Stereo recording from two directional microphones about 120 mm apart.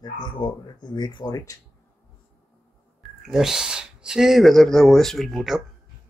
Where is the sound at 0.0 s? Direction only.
40° left (ahead or behind).